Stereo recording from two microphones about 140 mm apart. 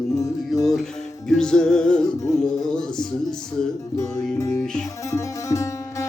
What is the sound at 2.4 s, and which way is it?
Music, 5° left (ahead or behind).